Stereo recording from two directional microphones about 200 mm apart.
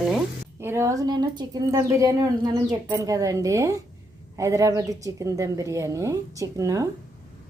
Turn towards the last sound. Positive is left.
turn(degrees=-15)  # may be behind; listen again after turning